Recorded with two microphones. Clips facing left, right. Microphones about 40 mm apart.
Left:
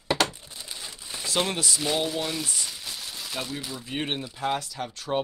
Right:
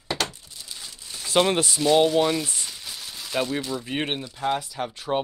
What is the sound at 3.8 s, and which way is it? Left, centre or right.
Speech, right.